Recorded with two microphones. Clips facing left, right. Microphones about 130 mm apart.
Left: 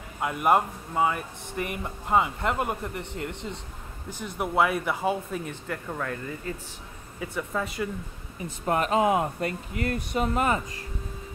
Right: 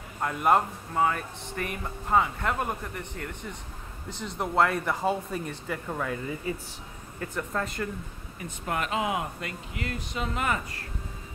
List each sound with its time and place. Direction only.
0.2 s speech: 10° left (ahead or behind); by 6.5 s 10° right (ahead or behind)
7.2 s speech: 5° left (ahead or behind)
8.6 s speech: 40° left (ahead or behind)